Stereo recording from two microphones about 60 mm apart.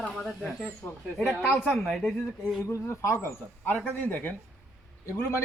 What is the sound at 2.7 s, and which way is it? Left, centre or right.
Speech, left.